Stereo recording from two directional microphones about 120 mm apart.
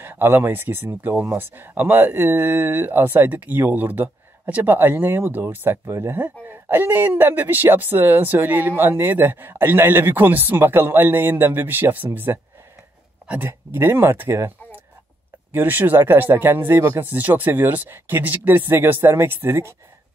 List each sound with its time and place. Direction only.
0.0 s speech: 20° right (ahead or behind)